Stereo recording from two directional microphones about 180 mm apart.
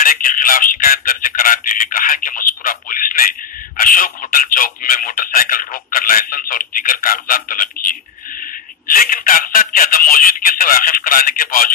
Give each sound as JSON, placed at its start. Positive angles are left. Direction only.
{"t": 0.0, "sound": "speech", "side_deg": 50}